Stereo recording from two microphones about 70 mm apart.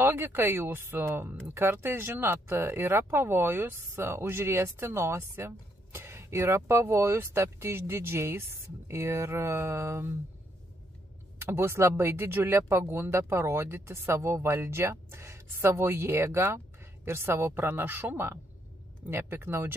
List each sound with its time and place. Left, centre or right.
0.0 s speech: right
11.3 s speech: right